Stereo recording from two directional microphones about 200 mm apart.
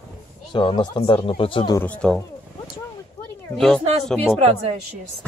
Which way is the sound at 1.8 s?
5° left (ahead or behind).